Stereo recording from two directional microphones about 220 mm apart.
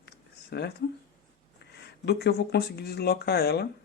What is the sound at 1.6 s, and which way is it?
Speech, 50° left (ahead or behind).